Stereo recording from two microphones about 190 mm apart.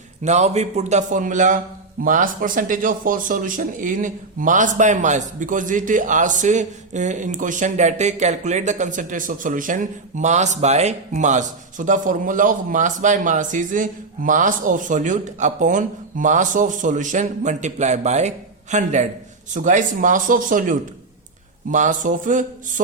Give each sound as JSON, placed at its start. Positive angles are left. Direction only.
{"t": 0.3, "sound": "speech", "side_deg": -35}